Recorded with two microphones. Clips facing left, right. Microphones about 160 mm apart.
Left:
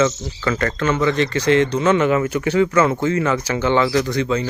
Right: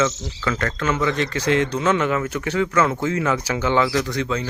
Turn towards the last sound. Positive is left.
turn(degrees=0)  # may be behind; listen again after turning